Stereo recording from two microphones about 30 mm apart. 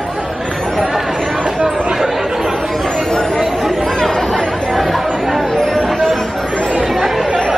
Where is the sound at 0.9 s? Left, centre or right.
Centre.